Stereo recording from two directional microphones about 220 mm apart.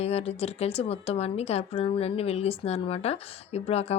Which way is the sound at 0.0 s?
30° left (ahead or behind).